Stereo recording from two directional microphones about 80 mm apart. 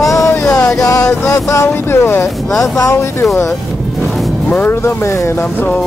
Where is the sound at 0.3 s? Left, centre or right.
Left.